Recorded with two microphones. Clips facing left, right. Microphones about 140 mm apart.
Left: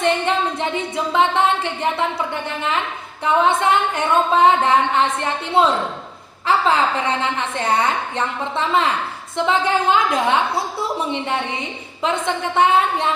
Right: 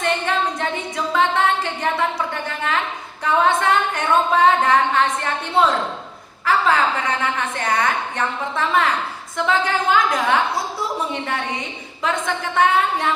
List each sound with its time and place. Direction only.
0.0 s a woman's voice: 20° left (ahead or behind)
12.0 s speech: 20° left (ahead or behind)